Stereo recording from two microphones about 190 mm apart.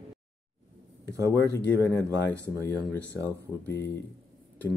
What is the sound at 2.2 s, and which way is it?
Speech, 5° left (ahead or behind).